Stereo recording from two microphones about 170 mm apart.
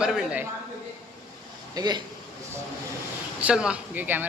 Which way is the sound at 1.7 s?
25° right (ahead or behind).